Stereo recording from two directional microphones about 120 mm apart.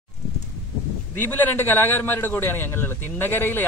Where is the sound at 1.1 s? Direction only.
15° left (ahead or behind).